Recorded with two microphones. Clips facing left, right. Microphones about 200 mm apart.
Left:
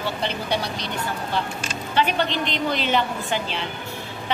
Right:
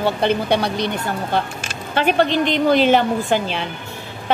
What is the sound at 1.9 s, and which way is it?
Speech, 45° right (ahead or behind).